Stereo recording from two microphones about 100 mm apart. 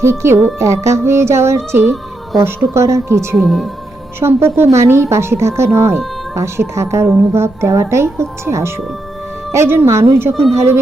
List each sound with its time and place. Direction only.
0.0 s a woman's voice: 25° right (ahead or behind)
3.4 s speech: centre (ahead or behind)
4.2 s a woman's voice: 25° right (ahead or behind)